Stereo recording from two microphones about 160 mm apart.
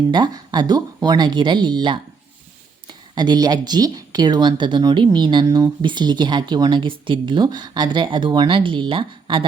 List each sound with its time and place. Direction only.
0.1 s speech: 25° right (ahead or behind)
3.2 s speech: 25° right (ahead or behind)